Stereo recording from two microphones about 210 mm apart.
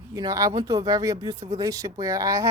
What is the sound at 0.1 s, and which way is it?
Speech, 15° right (ahead or behind).